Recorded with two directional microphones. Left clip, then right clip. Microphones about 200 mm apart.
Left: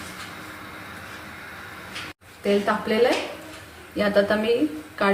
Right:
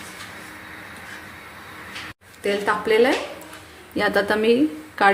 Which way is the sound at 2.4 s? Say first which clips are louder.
Right 2 dB; 50° right (ahead or behind).